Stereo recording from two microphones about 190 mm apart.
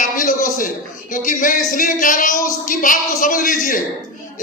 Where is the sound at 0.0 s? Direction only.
45° left (ahead or behind).